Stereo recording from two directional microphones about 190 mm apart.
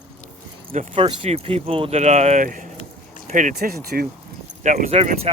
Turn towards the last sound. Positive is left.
turn(degrees=-35)  # may be behind; listen again after turning